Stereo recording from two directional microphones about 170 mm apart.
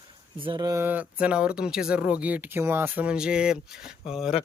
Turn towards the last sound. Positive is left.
turn(degrees=-5)  # may be behind; listen again after turning